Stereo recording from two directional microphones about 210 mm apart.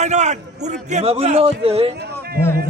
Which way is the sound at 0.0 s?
35° right (ahead or behind).